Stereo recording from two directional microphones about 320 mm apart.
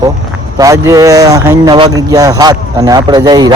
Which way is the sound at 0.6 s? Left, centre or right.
Centre.